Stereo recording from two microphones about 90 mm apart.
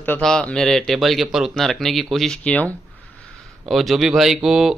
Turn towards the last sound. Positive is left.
turn(degrees=-5)  # may be behind; listen again after turning